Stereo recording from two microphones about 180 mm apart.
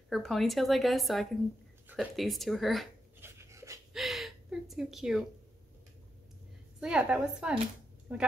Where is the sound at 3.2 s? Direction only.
15° right (ahead or behind).